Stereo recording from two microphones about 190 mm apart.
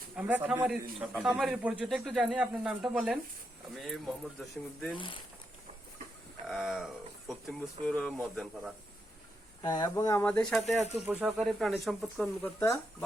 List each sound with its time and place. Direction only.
0.2 s speech: 10° right (ahead or behind)
4.9 s speech: 25° left (ahead or behind)
6.5 s speech: centre (ahead or behind)
9.6 s speech: 20° left (ahead or behind)
10.2 s speech: 5° left (ahead or behind)
11.0 s speech: 10° right (ahead or behind)
12.4 s speech: 10° left (ahead or behind)